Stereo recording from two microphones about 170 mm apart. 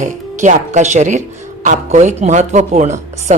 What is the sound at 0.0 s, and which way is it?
Speech, 45° right (ahead or behind).